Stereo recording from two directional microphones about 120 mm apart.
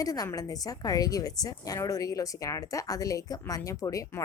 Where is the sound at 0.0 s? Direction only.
30° left (ahead or behind).